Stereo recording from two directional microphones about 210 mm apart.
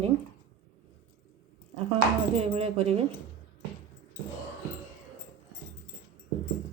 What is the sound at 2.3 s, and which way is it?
Speech, 30° right (ahead or behind).